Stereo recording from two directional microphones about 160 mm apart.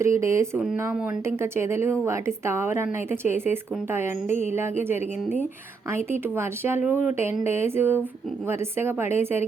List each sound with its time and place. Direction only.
0.0 s a woman's voice: 20° right (ahead or behind)